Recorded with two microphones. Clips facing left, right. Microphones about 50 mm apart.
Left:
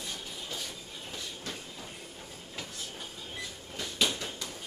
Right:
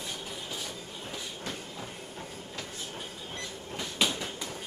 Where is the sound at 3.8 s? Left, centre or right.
Centre.